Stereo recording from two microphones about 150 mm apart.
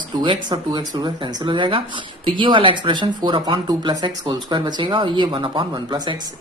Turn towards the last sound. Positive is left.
turn(degrees=-30)  # may be behind; listen again after turning